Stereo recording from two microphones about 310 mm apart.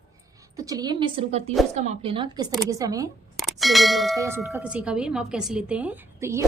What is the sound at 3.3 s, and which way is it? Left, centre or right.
Clang, centre.